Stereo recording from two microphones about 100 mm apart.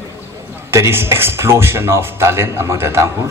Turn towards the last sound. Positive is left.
turn(degrees=-25)  # may be behind; listen again after turning